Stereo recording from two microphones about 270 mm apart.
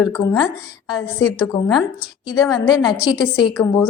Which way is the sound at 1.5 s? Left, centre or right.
Centre.